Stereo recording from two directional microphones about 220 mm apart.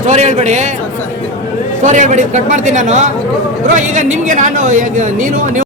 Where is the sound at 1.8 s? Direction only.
35° right (ahead or behind).